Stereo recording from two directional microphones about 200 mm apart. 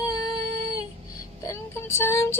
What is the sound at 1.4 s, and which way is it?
Child singing, 15° left (ahead or behind).